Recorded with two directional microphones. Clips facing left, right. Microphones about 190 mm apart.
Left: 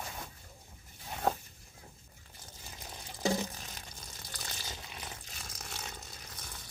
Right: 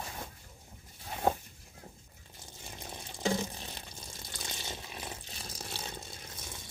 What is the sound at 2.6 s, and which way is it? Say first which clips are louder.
Water: right 4 dB; 25° right (ahead or behind).